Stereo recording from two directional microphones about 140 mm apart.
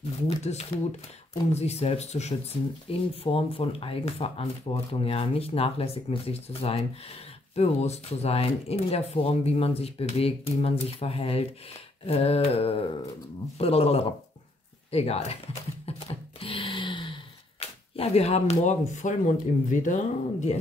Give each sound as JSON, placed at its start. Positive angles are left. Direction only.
{"t": 0.3, "sound": "speech", "side_deg": 50}
{"t": 15.8, "sound": "a sound", "side_deg": 45}
{"t": 19.7, "sound": "speech", "side_deg": 65}